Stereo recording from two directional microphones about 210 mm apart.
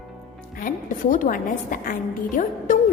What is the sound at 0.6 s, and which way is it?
A woman's voice, 40° left (ahead or behind).